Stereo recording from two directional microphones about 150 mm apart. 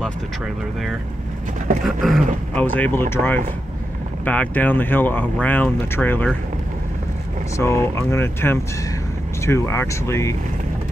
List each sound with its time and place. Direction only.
1.9 s a sound: centre (ahead or behind)
2.6 s speech: 10° left (ahead or behind)
7.5 s speech: 20° left (ahead or behind)